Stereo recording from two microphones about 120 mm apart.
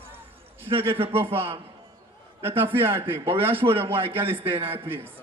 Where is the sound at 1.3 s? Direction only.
55° right (ahead or behind).